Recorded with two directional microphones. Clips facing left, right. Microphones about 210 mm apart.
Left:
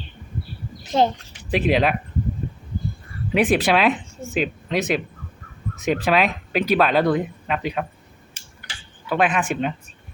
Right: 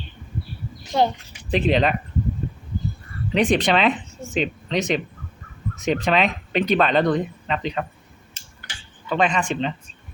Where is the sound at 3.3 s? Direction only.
5° left (ahead or behind).